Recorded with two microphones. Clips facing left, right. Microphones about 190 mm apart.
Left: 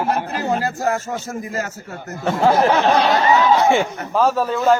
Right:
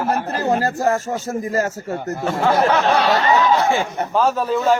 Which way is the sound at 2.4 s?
25° left (ahead or behind).